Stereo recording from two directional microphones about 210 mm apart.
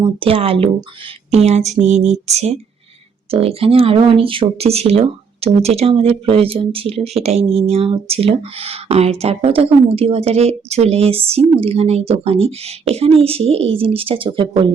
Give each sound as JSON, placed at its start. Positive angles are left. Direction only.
{"t": 0.0, "sound": "speech", "side_deg": -25}
{"t": 1.3, "sound": "a sound", "side_deg": -30}
{"t": 3.3, "sound": "speech", "side_deg": -25}